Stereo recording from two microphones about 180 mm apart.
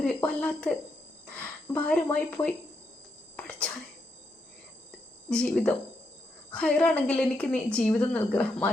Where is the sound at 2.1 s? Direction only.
10° left (ahead or behind).